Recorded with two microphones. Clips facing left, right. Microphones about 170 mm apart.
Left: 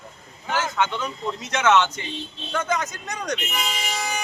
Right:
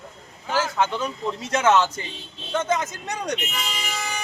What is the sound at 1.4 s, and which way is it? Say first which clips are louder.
Speech: even; 30° right (ahead or behind).